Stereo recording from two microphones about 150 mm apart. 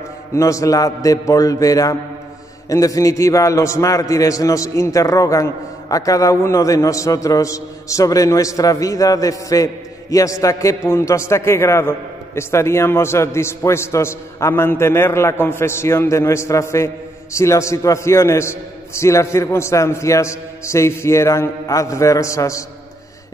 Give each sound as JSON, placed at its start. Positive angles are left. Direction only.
{"t": 0.3, "sound": "a man's voice", "side_deg": 20}